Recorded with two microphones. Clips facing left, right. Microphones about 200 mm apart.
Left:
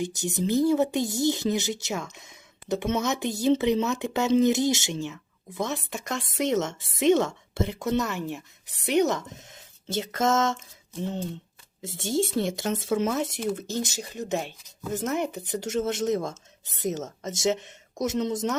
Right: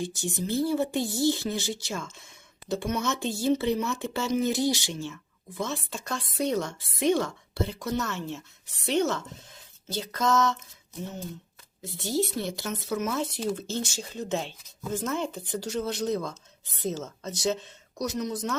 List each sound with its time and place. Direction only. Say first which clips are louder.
0.0 s speech: left 4 dB; 20° left (ahead or behind)
11.8 s speech: left 2 dB; 25° left (ahead or behind)